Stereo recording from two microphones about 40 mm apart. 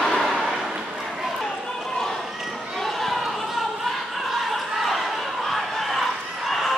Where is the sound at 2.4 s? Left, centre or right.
Centre.